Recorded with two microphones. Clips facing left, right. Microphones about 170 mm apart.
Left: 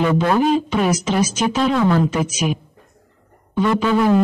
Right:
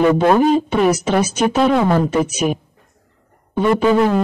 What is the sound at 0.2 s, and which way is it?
Speech, 50° right (ahead or behind).